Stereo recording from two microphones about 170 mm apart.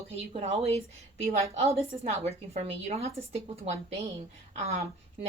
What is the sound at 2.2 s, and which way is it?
Speech, 40° right (ahead or behind).